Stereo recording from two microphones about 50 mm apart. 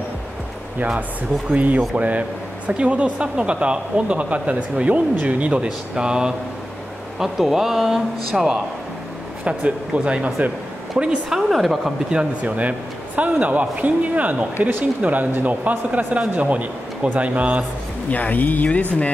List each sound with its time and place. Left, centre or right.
0.7 s speech: right; by 8.5 s centre
9.4 s speech: right
11.2 s a woman's voice: centre
12.1 s speech: right
18.1 s speech: left